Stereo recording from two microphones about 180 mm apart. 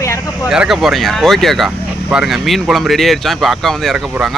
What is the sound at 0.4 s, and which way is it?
Speech, 5° right (ahead or behind).